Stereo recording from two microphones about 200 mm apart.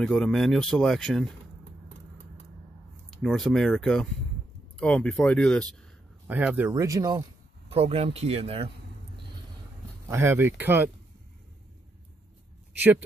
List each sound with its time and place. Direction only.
0.0 s speech: 5° left (ahead or behind)
3.1 s speech: centre (ahead or behind)
6.2 s speech: 10° right (ahead or behind); by 8.7 s 30° right (ahead or behind)
10.0 s speech: 10° right (ahead or behind)